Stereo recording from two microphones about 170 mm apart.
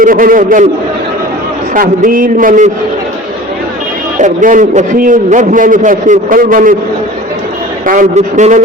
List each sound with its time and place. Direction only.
0.0 s a man's voice: 55° right (ahead or behind)
1.7 s a man's voice: 55° right (ahead or behind)
4.2 s a man's voice: 50° right (ahead or behind)
7.9 s a man's voice: 45° right (ahead or behind)